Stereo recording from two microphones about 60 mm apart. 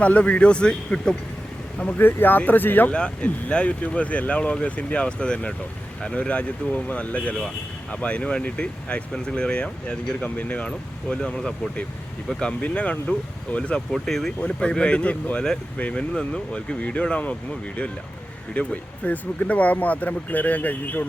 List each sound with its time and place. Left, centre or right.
0.0 s speech: left
2.0 s speech: left
2.9 s speech: centre
10.7 s speech: centre
13.9 s speech: centre; by 17.3 s left
18.5 s speech: left